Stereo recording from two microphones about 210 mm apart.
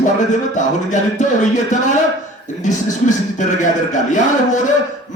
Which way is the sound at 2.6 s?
35° left (ahead or behind).